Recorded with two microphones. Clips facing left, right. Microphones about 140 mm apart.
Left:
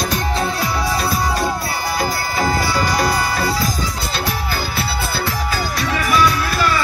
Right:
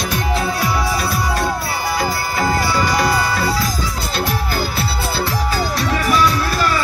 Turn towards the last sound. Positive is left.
turn(degrees=-35)  # may be behind; listen again after turning